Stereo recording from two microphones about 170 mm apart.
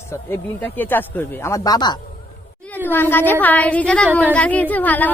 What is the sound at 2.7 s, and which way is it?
Speech, 10° left (ahead or behind).